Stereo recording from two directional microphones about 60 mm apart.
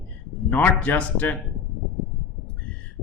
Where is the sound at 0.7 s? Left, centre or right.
Left.